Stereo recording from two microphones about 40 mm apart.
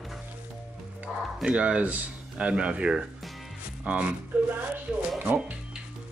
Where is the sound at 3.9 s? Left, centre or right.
Right.